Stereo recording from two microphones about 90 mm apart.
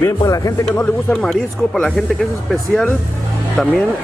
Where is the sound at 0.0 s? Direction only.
40° left (ahead or behind).